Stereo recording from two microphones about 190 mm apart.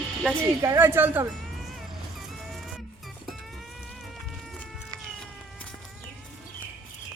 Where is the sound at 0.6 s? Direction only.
15° right (ahead or behind).